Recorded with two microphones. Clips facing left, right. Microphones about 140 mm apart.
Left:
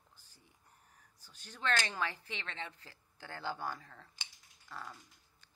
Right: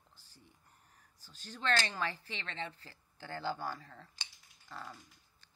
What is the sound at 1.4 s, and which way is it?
Speech, 10° left (ahead or behind).